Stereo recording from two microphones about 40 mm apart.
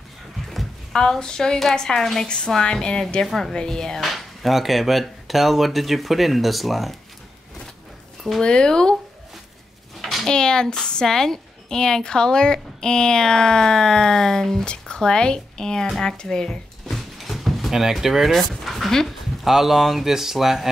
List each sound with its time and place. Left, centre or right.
0.6 s a sound: centre
0.9 s a woman's voice: centre
4.0 s speech: centre
8.4 s a woman's voice: left
10.2 s a woman's voice: centre
14.6 s a sound: left
15.0 s a woman's voice: left
16.8 s vehicle: centre
18.3 s speech: centre